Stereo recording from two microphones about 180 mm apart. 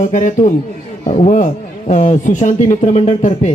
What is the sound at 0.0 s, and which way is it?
A man's voice, 45° left (ahead or behind).